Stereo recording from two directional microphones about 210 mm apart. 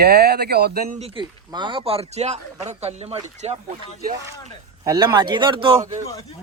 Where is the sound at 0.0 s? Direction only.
50° right (ahead or behind).